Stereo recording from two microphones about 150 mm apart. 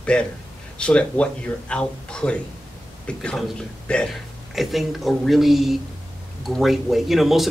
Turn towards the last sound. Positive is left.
turn(degrees=0)  # may be behind; listen again after turning